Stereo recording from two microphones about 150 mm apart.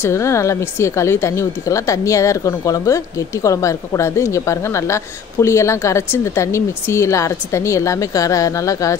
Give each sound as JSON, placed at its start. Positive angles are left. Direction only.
{"t": 0.0, "sound": "a woman's voice", "side_deg": 20}